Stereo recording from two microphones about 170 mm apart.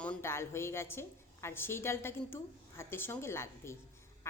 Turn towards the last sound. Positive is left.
turn(degrees=15)  # may be behind; listen again after turning